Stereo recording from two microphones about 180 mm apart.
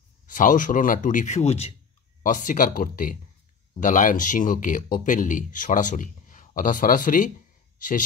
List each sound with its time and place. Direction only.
0.3 s speech: 45° left (ahead or behind)
2.2 s speech: 45° left (ahead or behind)